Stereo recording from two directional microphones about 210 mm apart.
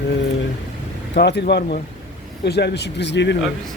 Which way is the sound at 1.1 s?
55° left (ahead or behind).